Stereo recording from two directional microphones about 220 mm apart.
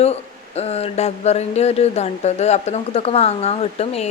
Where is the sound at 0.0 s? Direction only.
30° left (ahead or behind).